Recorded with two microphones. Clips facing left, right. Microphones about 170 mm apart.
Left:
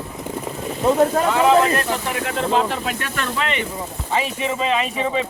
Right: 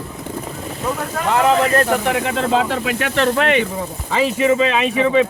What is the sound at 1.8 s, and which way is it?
Speech, 75° right (ahead or behind).